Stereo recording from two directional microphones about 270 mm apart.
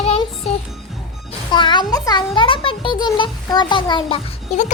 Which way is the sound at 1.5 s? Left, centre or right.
Centre.